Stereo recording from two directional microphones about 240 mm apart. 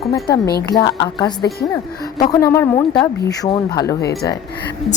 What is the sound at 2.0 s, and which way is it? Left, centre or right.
A woman's voice, centre.